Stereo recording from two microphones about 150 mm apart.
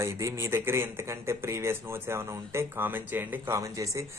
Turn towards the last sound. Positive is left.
turn(degrees=-20)  # may be behind; listen again after turning